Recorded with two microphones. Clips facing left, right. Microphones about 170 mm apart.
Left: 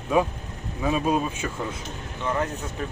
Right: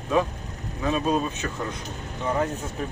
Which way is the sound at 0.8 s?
10° left (ahead or behind).